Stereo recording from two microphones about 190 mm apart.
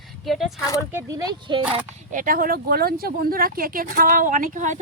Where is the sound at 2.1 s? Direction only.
45° right (ahead or behind).